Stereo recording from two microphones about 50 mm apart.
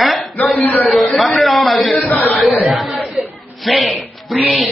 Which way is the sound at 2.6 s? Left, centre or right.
Centre.